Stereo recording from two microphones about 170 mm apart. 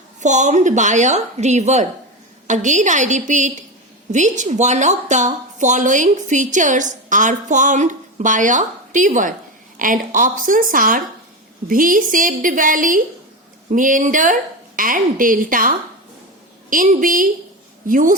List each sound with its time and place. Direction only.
0.2 s a woman's voice: 45° right (ahead or behind)